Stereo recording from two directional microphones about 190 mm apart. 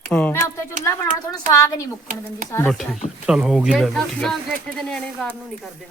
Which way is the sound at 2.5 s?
15° left (ahead or behind).